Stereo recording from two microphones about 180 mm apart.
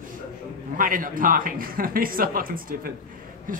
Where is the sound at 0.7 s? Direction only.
50° right (ahead or behind).